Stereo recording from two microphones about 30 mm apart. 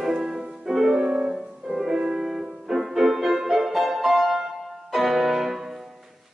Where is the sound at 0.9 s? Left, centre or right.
Right; by 5.5 s centre.